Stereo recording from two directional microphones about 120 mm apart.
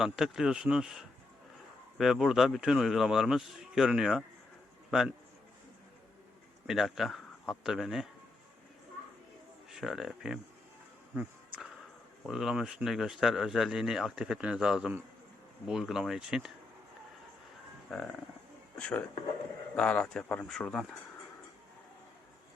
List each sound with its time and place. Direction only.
0.0 s a man's voice: 5° right (ahead or behind)
6.7 s speech: centre (ahead or behind)
9.6 s speech: 5° right (ahead or behind)
11.1 s insect: 10° right (ahead or behind)
12.3 s speech: 5° right (ahead or behind)
17.9 s speech: 5° left (ahead or behind)